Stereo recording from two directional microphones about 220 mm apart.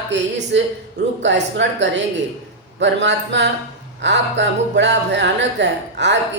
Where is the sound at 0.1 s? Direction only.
50° right (ahead or behind).